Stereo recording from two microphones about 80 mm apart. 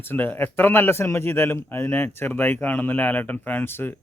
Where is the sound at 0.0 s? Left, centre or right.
Left.